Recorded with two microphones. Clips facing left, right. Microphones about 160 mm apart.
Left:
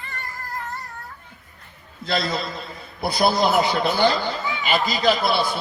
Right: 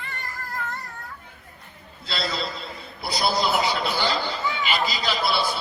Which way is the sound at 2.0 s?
50° left (ahead or behind).